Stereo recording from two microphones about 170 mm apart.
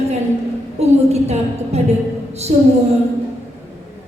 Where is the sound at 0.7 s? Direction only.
40° right (ahead or behind).